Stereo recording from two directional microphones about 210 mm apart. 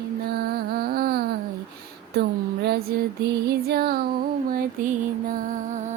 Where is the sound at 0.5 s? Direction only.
45° right (ahead or behind).